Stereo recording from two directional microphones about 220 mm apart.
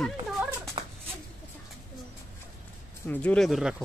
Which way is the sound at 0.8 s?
20° right (ahead or behind).